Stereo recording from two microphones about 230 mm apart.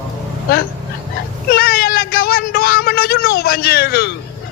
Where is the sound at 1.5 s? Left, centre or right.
Left.